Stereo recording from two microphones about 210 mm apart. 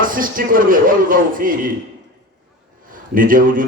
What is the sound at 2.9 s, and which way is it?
Speech, 40° right (ahead or behind).